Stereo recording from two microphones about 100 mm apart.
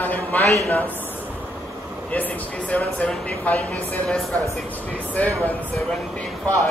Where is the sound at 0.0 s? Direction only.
15° left (ahead or behind).